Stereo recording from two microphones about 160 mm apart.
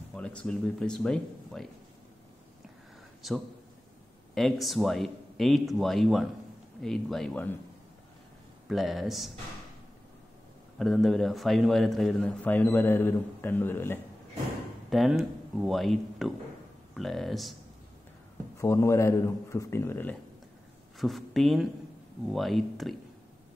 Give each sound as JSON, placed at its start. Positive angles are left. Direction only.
{"t": 0.1, "sound": "speech", "side_deg": 5}
{"t": 3.2, "sound": "speech", "side_deg": 0}
{"t": 8.6, "sound": "speech", "side_deg": 0}
{"t": 10.8, "sound": "a man's voice", "side_deg": 0}
{"t": 14.9, "sound": "speech", "side_deg": 0}
{"t": 18.6, "sound": "a man's voice", "side_deg": 20}
{"t": 21.0, "sound": "speech", "side_deg": 0}